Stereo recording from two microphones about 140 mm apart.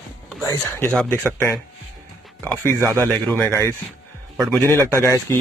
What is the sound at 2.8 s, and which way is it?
Speech, 20° right (ahead or behind).